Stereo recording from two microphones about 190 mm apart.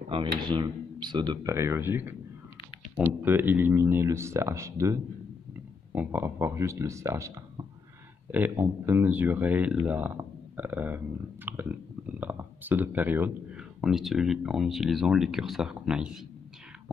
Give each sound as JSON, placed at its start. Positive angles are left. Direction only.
{"t": 0.1, "sound": "speech", "side_deg": -25}
{"t": 5.9, "sound": "speech", "side_deg": -10}